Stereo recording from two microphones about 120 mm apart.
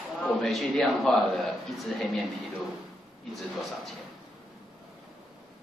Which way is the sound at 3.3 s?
Centre (ahead or behind).